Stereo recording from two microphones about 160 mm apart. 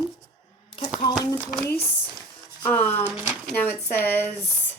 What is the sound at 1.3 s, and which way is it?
Speech, 10° left (ahead or behind).